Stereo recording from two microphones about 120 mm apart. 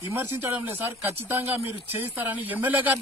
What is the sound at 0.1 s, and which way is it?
Speech, 20° right (ahead or behind).